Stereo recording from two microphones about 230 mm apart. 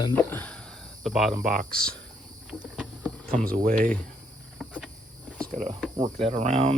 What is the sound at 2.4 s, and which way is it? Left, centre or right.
Cricket, centre.